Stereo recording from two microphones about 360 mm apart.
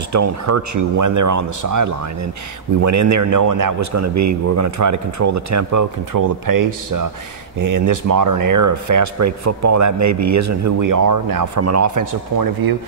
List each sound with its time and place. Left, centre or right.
0.1 s speech: right
11.6 s speech: right